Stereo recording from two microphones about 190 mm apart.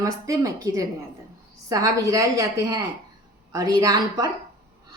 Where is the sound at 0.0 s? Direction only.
20° right (ahead or behind).